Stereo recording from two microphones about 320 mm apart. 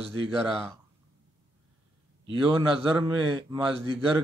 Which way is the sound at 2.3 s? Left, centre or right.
Centre.